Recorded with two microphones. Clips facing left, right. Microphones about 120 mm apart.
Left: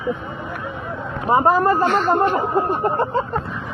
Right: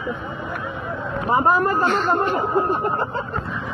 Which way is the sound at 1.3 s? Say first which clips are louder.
Left 3 dB; 30° left (ahead or behind).